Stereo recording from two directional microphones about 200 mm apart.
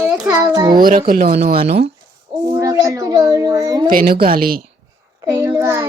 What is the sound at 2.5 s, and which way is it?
A child's voice, 15° right (ahead or behind).